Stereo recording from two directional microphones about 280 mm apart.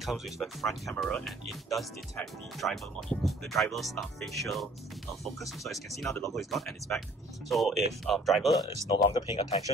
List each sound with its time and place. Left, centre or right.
0.0 s speech: centre
8.9 s speech: centre